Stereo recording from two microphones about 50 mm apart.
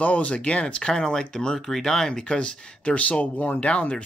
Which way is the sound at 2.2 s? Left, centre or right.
Left.